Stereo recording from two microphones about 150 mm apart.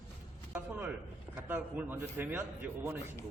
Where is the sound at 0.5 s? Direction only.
10° right (ahead or behind).